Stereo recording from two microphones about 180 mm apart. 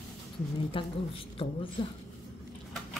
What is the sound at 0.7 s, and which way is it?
Speech, 30° left (ahead or behind).